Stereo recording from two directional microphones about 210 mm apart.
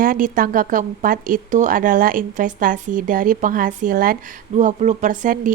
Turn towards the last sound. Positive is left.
turn(degrees=-40)  # may be behind; listen again after turning